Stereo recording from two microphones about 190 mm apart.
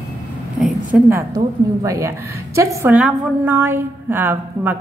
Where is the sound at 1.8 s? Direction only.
15° right (ahead or behind).